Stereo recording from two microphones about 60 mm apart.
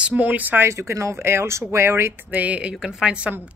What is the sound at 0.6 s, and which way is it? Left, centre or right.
Speech, right.